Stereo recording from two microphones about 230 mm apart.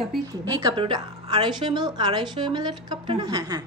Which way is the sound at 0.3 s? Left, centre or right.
Centre.